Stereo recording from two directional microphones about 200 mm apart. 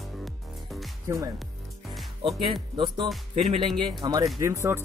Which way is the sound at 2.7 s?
20° right (ahead or behind).